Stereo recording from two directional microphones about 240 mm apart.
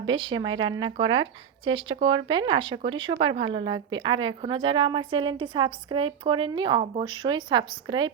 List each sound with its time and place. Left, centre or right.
0.0 s speech: centre